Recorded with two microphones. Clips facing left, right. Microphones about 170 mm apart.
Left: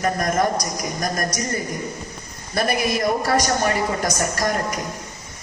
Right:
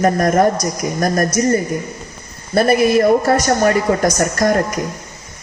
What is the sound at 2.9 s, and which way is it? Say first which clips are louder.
A woman's voice: right 8 dB; 60° right (ahead or behind).